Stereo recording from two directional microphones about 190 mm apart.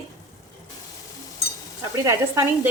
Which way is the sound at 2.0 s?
15° right (ahead or behind).